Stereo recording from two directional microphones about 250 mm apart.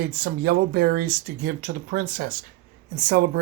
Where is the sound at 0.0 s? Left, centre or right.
Right.